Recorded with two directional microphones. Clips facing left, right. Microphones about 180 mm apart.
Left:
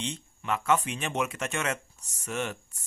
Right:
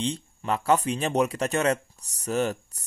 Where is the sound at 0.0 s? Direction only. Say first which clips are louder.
Right 6 dB; 35° right (ahead or behind).